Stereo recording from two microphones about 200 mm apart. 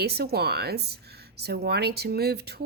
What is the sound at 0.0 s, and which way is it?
Speech, 55° right (ahead or behind).